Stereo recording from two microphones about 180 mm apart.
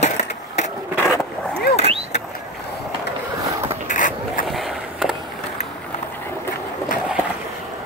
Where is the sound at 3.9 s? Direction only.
45° left (ahead or behind).